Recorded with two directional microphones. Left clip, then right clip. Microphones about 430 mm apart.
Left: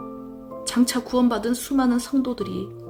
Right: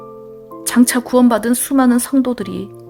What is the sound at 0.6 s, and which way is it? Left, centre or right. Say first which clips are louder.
Speech: right 8 dB; right.